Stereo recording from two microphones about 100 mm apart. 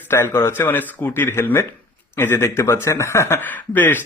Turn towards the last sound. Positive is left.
turn(degrees=20)  # may be behind; listen again after turning